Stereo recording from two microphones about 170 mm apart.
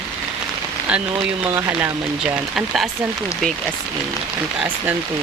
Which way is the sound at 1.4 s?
15° right (ahead or behind).